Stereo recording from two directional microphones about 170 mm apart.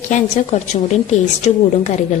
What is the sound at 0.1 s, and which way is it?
A woman's voice, 45° left (ahead or behind).